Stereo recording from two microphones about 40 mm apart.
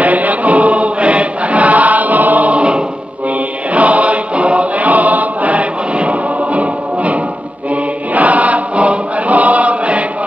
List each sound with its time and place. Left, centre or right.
0.0 s chant: right
3.7 s choir: right
7.7 s chant: right